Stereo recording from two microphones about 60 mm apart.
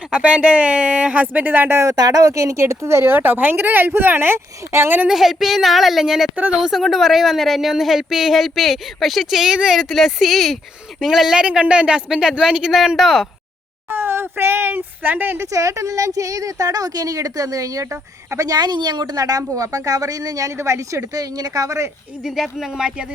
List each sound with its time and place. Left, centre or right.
0.1 s speech: centre
1.9 s speech: right
5.0 s a woman's voice: centre
13.9 s speech: right
15.5 s a woman's voice: right
18.3 s speech: right
19.1 s speech: right
20.6 s a woman's voice: right
22.2 s speech: centre